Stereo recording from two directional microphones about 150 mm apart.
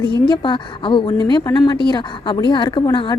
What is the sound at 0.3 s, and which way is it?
A woman's voice, 30° left (ahead or behind).